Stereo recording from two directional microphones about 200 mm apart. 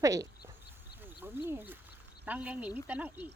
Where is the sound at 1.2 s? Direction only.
10° right (ahead or behind).